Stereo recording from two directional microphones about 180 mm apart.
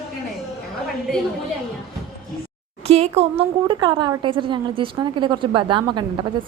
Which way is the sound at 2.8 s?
35° right (ahead or behind).